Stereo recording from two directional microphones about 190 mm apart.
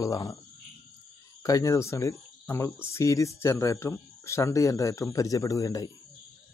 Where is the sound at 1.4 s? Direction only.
15° left (ahead or behind).